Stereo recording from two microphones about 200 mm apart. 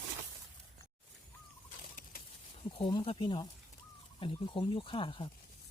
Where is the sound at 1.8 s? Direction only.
45° left (ahead or behind).